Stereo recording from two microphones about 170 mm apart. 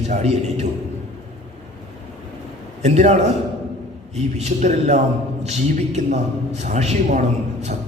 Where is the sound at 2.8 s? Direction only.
40° right (ahead or behind).